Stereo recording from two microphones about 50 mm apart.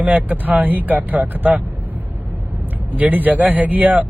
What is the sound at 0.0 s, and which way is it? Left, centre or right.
Speech, right.